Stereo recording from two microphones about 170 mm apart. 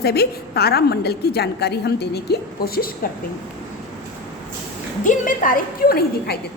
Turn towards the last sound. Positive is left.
turn(degrees=65)  # may be behind; listen again after turning